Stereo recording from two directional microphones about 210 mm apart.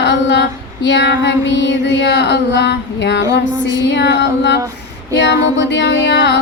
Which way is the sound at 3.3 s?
60° left (ahead or behind).